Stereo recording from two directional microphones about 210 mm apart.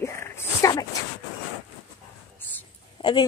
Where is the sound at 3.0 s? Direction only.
25° left (ahead or behind).